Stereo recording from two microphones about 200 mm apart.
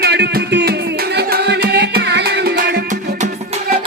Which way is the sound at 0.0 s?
55° right (ahead or behind).